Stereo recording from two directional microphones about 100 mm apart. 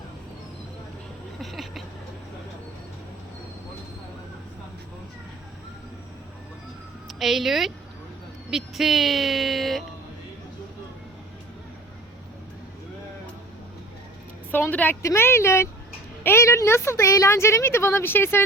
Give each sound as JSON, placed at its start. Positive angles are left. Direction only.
{"t": 1.4, "sound": "a sound", "side_deg": 0}
{"t": 7.1, "sound": "speech", "side_deg": 0}
{"t": 14.5, "sound": "a woman's voice", "side_deg": 15}